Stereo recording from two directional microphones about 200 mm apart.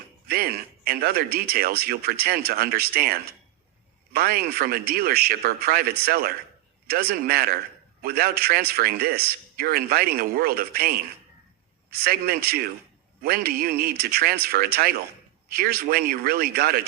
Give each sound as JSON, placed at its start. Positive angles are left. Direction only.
{"t": 0.3, "sound": "speech", "side_deg": -50}